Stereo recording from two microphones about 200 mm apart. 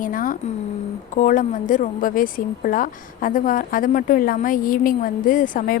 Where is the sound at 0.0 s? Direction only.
45° left (ahead or behind).